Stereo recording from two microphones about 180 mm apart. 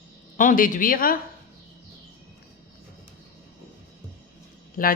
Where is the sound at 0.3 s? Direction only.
50° left (ahead or behind).